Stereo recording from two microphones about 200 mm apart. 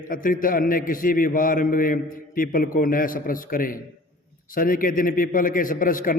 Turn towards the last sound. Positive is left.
turn(degrees=45)  # may be behind; listen again after turning